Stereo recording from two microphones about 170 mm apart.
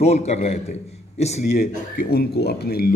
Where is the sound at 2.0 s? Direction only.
70° left (ahead or behind).